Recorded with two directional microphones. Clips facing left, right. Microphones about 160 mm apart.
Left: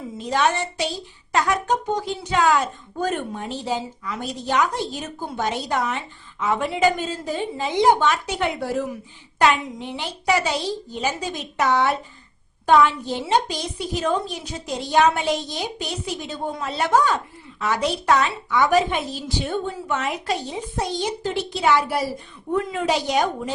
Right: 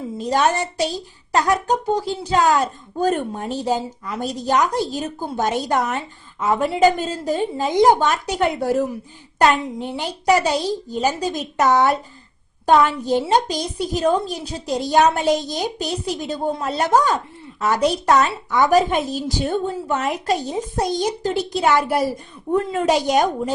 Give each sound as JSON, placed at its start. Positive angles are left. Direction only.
{"t": 0.3, "sound": "a woman's voice", "side_deg": -40}